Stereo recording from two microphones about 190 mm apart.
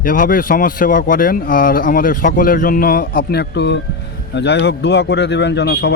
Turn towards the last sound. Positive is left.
turn(degrees=65)  # may be behind; listen again after turning